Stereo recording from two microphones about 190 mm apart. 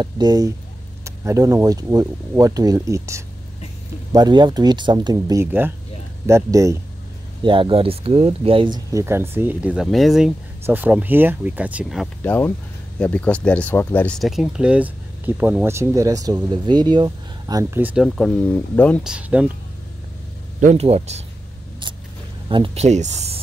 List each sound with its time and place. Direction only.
0.0 s speech: 20° right (ahead or behind)
7.4 s speech: 25° right (ahead or behind); by 12.1 s 5° right (ahead or behind)
12.2 s speech: 10° left (ahead or behind)
19.1 s speech: 5° right (ahead or behind)
20.6 s speech: 35° right (ahead or behind)
22.5 s speech: 30° right (ahead or behind)